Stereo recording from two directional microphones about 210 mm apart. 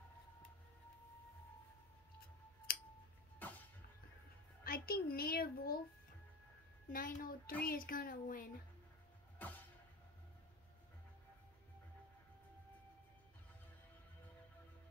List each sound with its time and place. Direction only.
2.7 s scissors: 45° left (ahead or behind)
3.3 s music: 10° left (ahead or behind)
4.6 s a child's voice: 45° left (ahead or behind)
6.9 s a child's voice: 40° left (ahead or behind)
9.4 s music: 10° left (ahead or behind)